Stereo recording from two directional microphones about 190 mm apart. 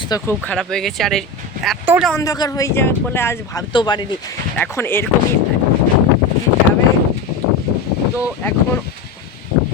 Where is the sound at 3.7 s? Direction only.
25° left (ahead or behind).